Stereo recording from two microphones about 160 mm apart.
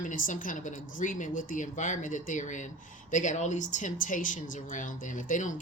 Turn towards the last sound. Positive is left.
turn(degrees=50)  # may be behind; listen again after turning